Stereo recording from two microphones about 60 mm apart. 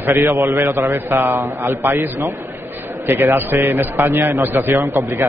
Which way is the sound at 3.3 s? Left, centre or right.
Right.